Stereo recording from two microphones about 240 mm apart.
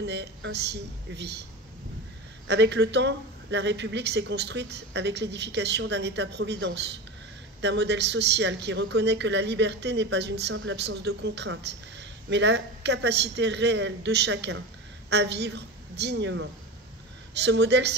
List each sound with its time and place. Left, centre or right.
0.0 s speech: right
2.4 s a woman's voice: right
17.5 s speech: right